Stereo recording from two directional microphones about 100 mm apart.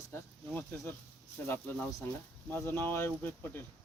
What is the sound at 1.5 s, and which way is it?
Speech, 20° left (ahead or behind).